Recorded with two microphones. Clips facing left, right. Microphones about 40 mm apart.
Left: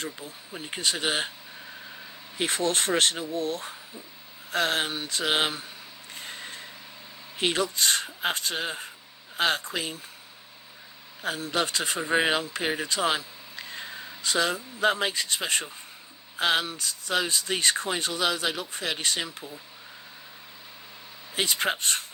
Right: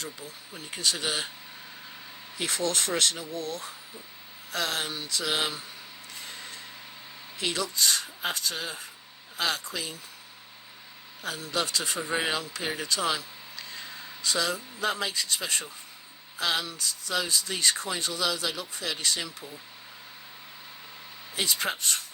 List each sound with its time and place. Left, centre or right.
0.0 s speech: left
2.4 s speech: left
6.1 s a sound: left
7.3 s speech: left
11.2 s speech: left
21.3 s speech: left